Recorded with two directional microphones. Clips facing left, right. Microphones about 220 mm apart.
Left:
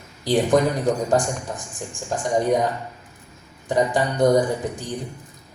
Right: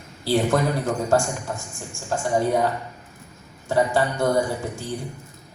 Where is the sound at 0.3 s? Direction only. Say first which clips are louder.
Left 2 dB; 15° left (ahead or behind).